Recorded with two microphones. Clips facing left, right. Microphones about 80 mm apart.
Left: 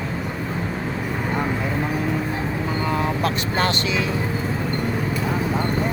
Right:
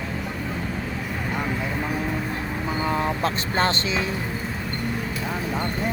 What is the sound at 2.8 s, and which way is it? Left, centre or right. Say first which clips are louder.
Vehicle: even; centre.